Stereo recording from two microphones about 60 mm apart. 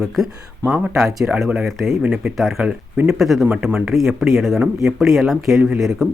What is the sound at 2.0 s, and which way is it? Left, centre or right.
Speech, centre.